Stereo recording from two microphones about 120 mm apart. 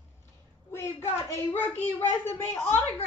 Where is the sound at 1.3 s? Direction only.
20° left (ahead or behind).